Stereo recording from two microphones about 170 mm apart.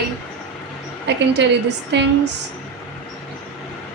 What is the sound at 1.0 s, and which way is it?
A woman's voice, 90° right.